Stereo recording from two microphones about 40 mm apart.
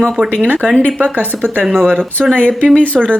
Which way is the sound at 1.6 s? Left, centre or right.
Centre.